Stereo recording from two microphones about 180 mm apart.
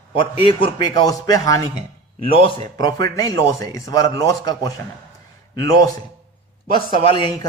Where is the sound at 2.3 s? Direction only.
30° left (ahead or behind).